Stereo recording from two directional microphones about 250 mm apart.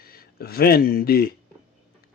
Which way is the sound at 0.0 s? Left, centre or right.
Left.